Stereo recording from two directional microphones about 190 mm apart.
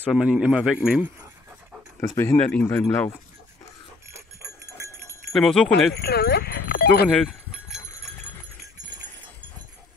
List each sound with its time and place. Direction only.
0.0 s speech: 5° right (ahead or behind)
2.0 s speech: 10° left (ahead or behind)
5.3 s speech: centre (ahead or behind)
5.9 s speech: 55° left (ahead or behind)
7.1 s cowbell: centre (ahead or behind)